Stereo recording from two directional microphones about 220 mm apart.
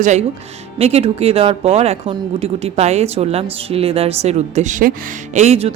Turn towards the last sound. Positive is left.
turn(degrees=-30)  # may be behind; listen again after turning